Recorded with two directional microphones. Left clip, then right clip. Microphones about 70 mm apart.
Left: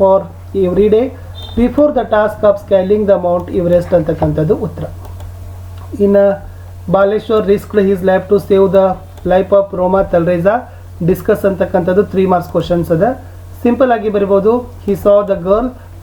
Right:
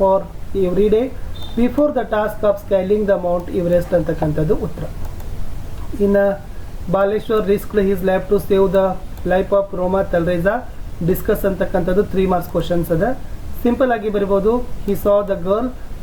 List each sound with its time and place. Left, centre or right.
0.0 s speech: centre
6.1 s speech: centre
9.9 s speech: centre